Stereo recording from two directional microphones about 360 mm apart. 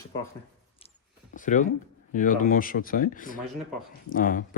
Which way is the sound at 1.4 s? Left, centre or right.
Left.